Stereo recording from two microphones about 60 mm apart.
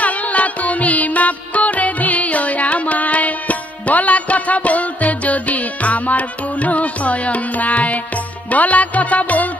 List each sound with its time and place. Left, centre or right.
0.0 s music: left